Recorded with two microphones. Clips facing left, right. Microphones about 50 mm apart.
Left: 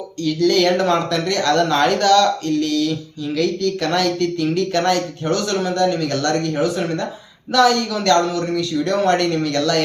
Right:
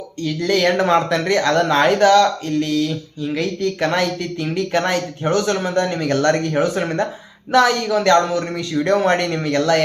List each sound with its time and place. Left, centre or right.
0.3 s speech: right